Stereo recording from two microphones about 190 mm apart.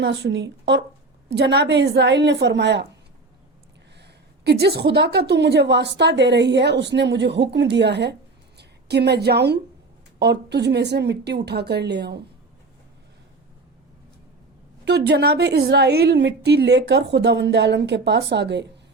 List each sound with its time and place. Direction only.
0.0 s a woman's voice: 65° right (ahead or behind)
4.0 s a woman's voice: 60° right (ahead or behind)
14.8 s a woman's voice: 60° right (ahead or behind)